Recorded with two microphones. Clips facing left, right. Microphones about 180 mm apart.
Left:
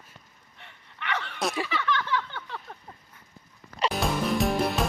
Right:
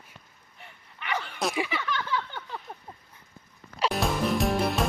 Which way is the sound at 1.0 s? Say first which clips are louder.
Even; 10° right (ahead or behind).